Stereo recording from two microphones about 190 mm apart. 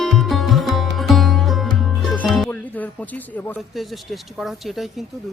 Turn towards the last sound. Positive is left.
turn(degrees=0)  # may be behind; listen again after turning